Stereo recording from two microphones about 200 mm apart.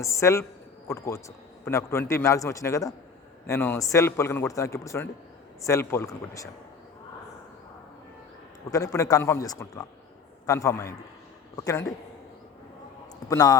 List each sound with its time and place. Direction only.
0.0 s a man's voice: 15° left (ahead or behind)
8.7 s a man's voice: 15° left (ahead or behind)
13.2 s a man's voice: 20° left (ahead or behind)